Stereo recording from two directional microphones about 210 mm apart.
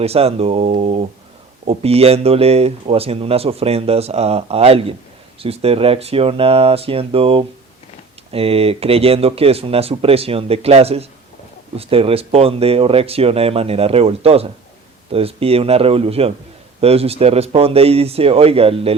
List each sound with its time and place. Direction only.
0.0 s speech: 30° right (ahead or behind)